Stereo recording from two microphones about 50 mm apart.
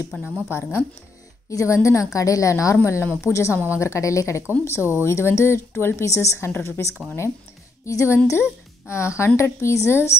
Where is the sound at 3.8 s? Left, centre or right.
Left.